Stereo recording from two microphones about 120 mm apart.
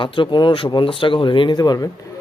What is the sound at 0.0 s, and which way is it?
Speech, 45° left (ahead or behind).